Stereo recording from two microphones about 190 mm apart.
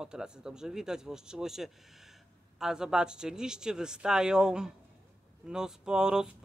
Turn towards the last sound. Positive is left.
turn(degrees=-5)  # may be behind; listen again after turning